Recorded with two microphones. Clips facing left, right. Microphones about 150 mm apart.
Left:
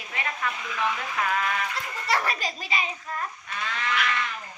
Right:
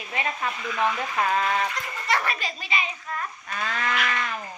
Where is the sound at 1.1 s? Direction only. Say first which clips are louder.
Right 3 dB; 35° right (ahead or behind).